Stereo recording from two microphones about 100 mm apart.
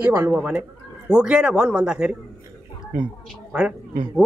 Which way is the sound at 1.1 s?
10° right (ahead or behind).